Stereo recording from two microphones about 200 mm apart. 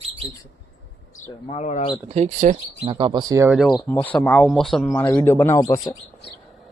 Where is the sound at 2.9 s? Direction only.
25° right (ahead or behind).